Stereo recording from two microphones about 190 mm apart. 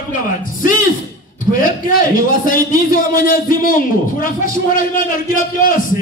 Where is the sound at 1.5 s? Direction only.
45° left (ahead or behind).